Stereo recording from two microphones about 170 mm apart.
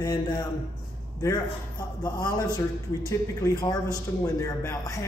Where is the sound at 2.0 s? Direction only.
25° left (ahead or behind).